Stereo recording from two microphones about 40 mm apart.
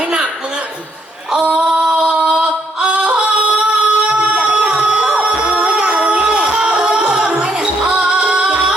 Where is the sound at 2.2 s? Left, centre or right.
Right.